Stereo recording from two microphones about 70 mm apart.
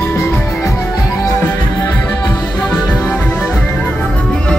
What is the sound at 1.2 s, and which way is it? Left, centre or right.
Music, left.